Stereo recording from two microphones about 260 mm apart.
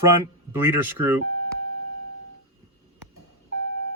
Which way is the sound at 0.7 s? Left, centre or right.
Centre.